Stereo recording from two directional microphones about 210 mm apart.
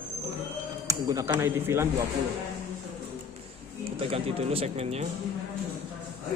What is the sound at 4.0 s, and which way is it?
Speech, 25° right (ahead or behind).